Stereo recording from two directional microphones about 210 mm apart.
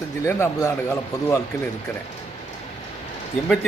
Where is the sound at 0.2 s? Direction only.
10° left (ahead or behind).